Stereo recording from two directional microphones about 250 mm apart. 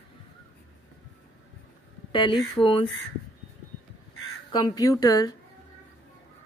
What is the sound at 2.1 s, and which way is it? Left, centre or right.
Speech, centre.